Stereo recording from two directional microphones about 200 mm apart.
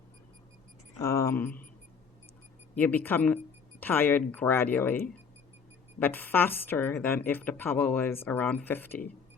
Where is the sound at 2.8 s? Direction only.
10° left (ahead or behind).